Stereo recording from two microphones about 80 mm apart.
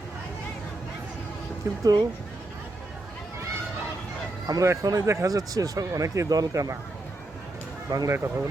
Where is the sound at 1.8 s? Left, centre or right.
Right.